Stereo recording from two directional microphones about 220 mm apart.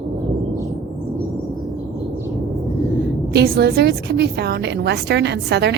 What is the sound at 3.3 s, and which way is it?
A woman's voice, 45° right (ahead or behind).